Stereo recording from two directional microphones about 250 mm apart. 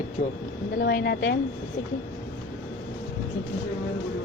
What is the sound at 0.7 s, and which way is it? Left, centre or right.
Speech, left.